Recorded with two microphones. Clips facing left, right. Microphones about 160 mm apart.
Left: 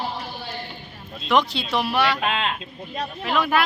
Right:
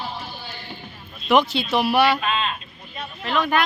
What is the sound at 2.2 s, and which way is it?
Speech, 80° left.